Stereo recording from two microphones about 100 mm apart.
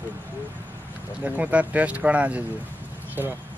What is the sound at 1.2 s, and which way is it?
Speech, 15° right (ahead or behind).